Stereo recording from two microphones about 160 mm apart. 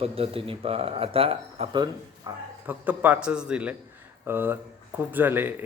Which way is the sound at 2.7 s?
10° right (ahead or behind).